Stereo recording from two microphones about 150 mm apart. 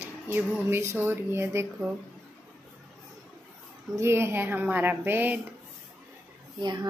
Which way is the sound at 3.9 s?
15° right (ahead or behind).